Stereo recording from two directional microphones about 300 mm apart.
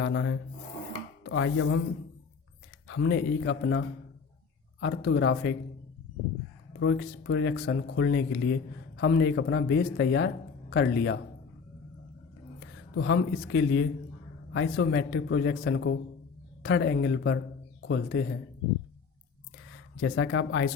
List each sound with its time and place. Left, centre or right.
0.0 s speech: left
1.2 s chopping: left
2.8 s speech: left
6.7 s speech: left
13.0 s a man's voice: left
20.0 s speech: left